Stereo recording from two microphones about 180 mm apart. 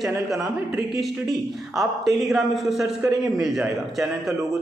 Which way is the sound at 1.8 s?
Centre (ahead or behind).